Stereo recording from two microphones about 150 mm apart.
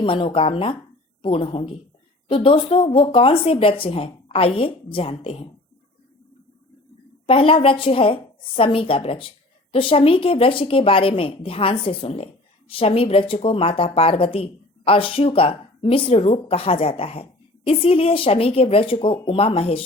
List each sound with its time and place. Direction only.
0.0 s a woman's voice: 35° left (ahead or behind)
7.3 s a woman's voice: 35° left (ahead or behind)